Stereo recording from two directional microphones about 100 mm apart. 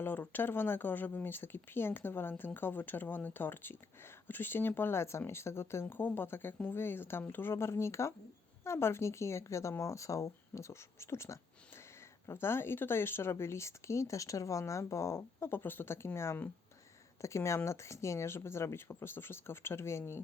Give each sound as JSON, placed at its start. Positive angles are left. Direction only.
{"t": 0.0, "sound": "speech", "side_deg": 20}